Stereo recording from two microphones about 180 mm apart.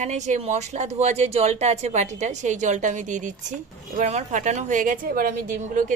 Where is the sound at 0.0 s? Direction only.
40° right (ahead or behind).